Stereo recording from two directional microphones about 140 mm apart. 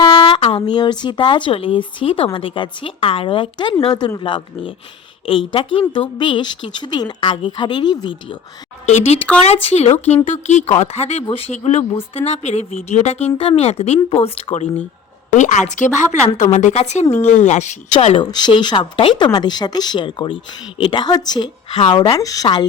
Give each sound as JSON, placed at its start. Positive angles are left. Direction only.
{"t": 0.0, "sound": "speech", "side_deg": 35}
{"t": 8.9, "sound": "speech", "side_deg": 50}
{"t": 18.2, "sound": "speech", "side_deg": 30}